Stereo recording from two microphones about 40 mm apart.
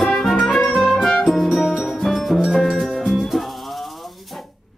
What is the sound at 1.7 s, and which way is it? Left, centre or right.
Music, centre.